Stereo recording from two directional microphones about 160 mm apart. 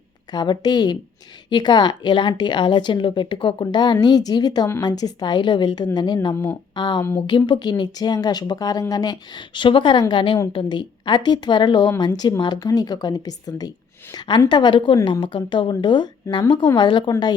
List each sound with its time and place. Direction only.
0.3 s a woman's voice: 25° left (ahead or behind)